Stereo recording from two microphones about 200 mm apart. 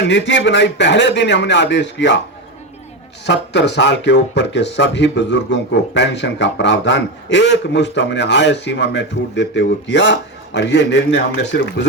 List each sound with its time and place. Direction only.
0.0 s speech: 60° left (ahead or behind)
3.2 s speech: 60° left (ahead or behind)